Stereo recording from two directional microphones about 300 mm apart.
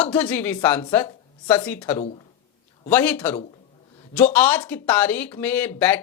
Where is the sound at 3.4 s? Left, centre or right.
Centre.